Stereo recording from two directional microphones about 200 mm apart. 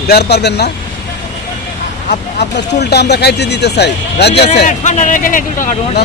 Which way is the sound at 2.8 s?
55° left (ahead or behind).